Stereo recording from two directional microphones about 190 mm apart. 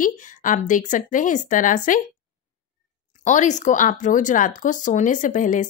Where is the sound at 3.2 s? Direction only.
40° left (ahead or behind).